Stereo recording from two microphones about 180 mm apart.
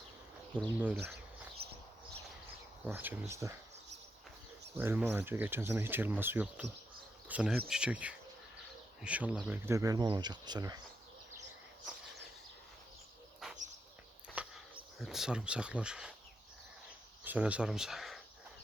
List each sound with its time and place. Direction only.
0.5 s speech: 5° left (ahead or behind)
1.6 s a sound: 60° right (ahead or behind)
2.8 s speech: 10° right (ahead or behind)
4.8 s speech: 10° right (ahead or behind)
13.4 s bird: centre (ahead or behind)
14.3 s speech: centre (ahead or behind)
17.2 s speech: 5° right (ahead or behind)